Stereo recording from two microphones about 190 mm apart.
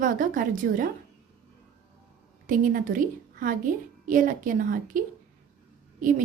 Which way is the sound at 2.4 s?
45° right (ahead or behind).